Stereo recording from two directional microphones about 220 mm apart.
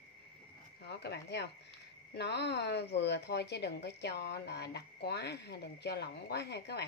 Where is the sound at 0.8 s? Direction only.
50° left (ahead or behind).